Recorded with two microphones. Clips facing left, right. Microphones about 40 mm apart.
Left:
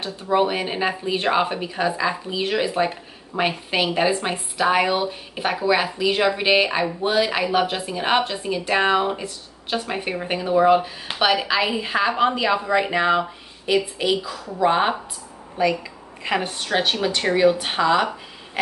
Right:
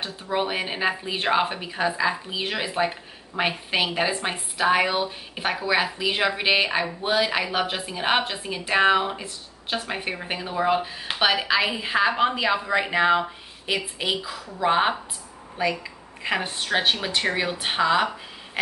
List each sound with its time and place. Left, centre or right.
0.0 s a woman's voice: centre